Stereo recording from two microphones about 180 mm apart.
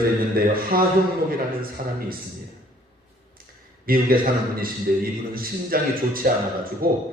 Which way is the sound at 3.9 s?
55° right (ahead or behind).